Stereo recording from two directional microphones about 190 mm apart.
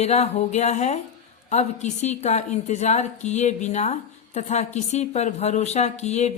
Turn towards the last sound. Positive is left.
turn(degrees=35)  # may be behind; listen again after turning